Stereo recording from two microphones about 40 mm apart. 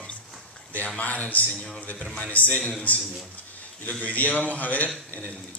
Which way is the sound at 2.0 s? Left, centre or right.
Left.